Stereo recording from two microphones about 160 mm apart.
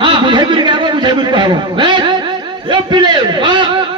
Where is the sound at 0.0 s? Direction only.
30° right (ahead or behind).